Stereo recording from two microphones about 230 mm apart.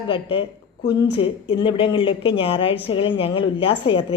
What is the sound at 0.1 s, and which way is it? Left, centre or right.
A woman's voice, left.